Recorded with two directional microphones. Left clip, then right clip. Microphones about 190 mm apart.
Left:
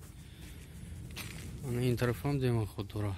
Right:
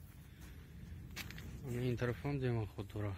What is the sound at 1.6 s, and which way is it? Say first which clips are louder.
Speech: left 6 dB; 15° left (ahead or behind).